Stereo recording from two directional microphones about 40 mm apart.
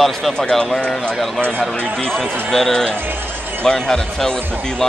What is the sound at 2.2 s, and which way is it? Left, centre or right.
Speech, right.